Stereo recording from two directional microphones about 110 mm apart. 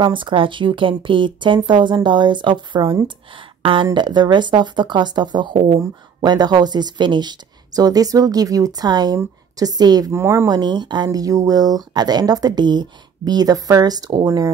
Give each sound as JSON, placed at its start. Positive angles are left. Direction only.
{"t": 0.0, "sound": "speech", "side_deg": -50}
{"t": 10.1, "sound": "speech", "side_deg": -25}
{"t": 10.5, "sound": "speech", "side_deg": -40}